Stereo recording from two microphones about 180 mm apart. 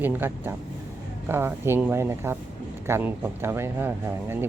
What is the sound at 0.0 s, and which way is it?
Speech, 10° right (ahead or behind).